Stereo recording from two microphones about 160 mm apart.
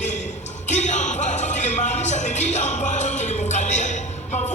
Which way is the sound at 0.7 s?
50° left (ahead or behind).